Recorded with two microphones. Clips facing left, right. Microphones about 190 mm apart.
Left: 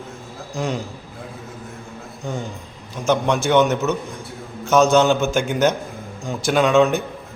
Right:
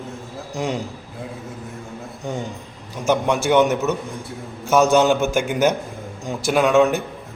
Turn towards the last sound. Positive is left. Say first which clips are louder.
# even
turn(degrees=-10)  # may be behind; listen again after turning